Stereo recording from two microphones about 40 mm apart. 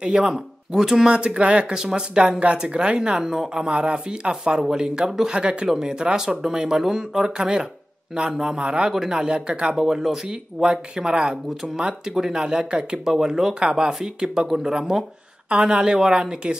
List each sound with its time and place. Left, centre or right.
0.0 s speech: centre
1.1 s speech: right
1.7 s speech: centre
8.9 s speech: centre
9.2 s speech: right
9.8 s speech: centre